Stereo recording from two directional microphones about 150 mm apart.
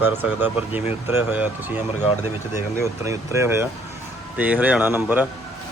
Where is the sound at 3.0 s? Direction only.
15° right (ahead or behind).